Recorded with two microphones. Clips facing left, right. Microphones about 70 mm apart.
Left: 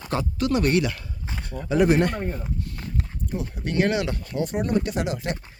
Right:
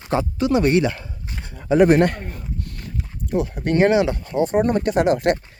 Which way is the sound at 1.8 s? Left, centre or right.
Right.